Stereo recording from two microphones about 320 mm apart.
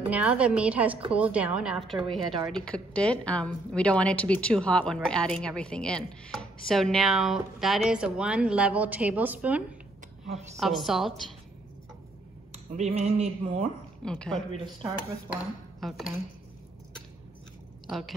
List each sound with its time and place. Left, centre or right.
0.1 s a woman's voice: centre
10.6 s a woman's voice: centre
12.7 s a sound: right
14.0 s a woman's voice: centre
14.5 s speech: centre
17.8 s a woman's voice: centre